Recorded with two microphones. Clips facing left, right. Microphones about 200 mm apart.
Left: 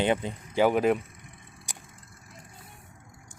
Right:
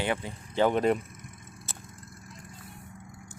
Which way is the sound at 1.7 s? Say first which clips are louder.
Left 1 dB; 15° left (ahead or behind).